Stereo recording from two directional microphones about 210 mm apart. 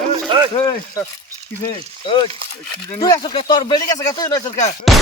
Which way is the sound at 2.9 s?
20° left (ahead or behind).